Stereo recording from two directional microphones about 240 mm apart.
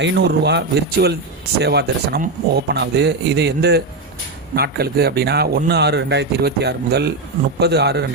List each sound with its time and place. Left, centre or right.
0.0 s a man's voice: right